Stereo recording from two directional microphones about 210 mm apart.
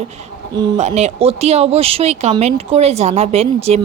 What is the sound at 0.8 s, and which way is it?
Speech, 30° right (ahead or behind).